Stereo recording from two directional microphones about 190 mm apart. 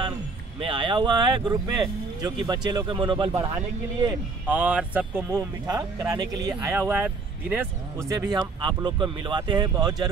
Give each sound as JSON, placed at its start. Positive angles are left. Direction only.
{"t": 0.6, "sound": "speech", "side_deg": -25}